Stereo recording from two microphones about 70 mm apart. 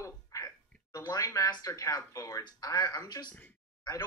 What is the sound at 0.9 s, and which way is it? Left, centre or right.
Speech, left.